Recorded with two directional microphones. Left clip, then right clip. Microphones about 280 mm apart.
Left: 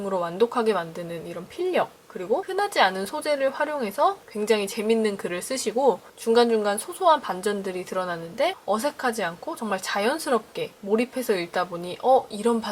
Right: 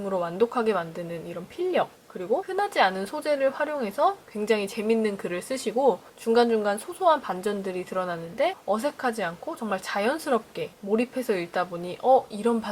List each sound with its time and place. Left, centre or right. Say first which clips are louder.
0.0 s a woman's voice: left 1 dB; centre
0.5 s a woman's voice: left 2 dB; centre
5.7 s speech: left 1 dB; right
6.2 s a woman's voice: left 2 dB; centre